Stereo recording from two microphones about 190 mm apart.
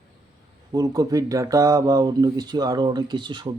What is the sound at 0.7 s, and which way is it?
Speech, 20° right (ahead or behind).